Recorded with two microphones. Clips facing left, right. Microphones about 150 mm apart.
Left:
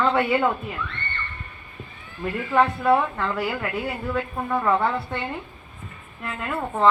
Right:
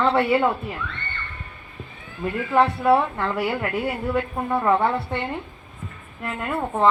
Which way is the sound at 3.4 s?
20° right (ahead or behind).